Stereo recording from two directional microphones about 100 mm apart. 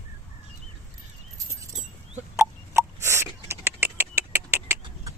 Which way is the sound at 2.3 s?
25° right (ahead or behind).